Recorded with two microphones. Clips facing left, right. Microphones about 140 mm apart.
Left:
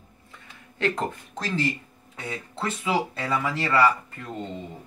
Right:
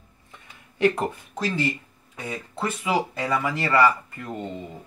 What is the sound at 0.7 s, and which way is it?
Speech, 10° right (ahead or behind).